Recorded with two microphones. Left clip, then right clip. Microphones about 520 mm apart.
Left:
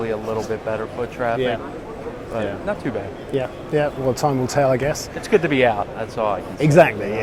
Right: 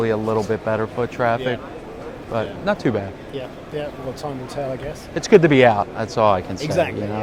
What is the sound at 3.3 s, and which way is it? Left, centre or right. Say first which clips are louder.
Speech: left 8 dB; left.